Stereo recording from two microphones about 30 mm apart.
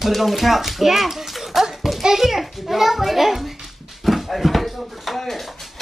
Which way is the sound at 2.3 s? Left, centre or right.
Centre.